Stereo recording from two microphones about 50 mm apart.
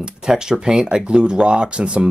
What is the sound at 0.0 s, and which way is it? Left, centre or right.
Speech, centre.